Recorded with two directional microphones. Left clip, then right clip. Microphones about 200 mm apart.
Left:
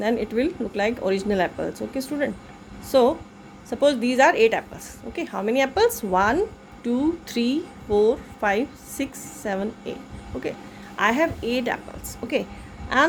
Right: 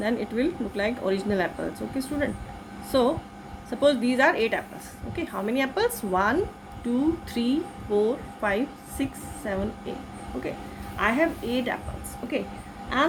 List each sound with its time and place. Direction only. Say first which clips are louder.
0.0 s a woman's voice: left 3 dB; 40° left (ahead or behind)
10.9 s a woman's voice: left 3 dB; 50° left (ahead or behind)